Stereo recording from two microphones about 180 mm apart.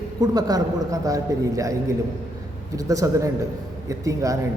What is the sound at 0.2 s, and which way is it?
A man's voice, 20° right (ahead or behind).